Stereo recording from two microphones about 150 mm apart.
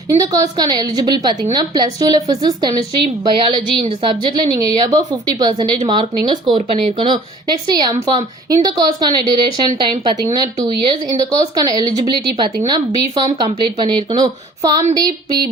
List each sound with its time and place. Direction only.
0.1 s a woman's voice: 25° right (ahead or behind)